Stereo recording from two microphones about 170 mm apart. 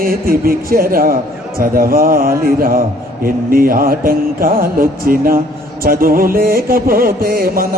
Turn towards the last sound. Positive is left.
turn(degrees=-60)  # may be behind; listen again after turning